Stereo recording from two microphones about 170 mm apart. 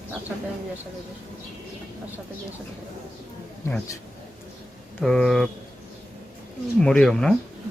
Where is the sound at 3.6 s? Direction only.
15° left (ahead or behind).